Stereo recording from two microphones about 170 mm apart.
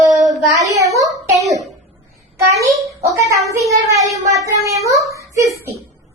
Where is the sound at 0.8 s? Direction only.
20° right (ahead or behind).